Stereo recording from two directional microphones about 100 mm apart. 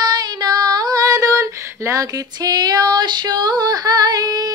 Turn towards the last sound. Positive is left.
turn(degrees=-40)  # may be behind; listen again after turning